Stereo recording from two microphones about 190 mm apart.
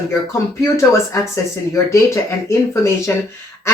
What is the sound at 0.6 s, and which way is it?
Speech, 15° left (ahead or behind).